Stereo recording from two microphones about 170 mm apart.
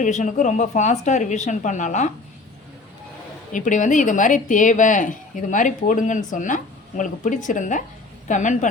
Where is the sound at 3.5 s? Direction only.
50° left (ahead or behind).